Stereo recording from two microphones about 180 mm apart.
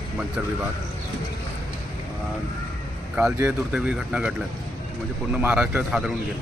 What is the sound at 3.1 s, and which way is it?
A man's voice, 10° right (ahead or behind).